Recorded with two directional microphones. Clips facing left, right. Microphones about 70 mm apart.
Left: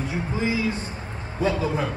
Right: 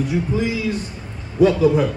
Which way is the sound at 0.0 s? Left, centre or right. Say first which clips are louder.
Right 5 dB; left.